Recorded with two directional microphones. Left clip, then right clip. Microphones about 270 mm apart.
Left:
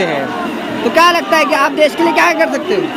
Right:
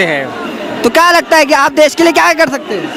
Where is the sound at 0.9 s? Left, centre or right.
Right.